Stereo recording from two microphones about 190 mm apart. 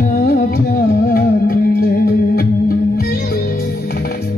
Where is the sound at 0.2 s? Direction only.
50° left (ahead or behind).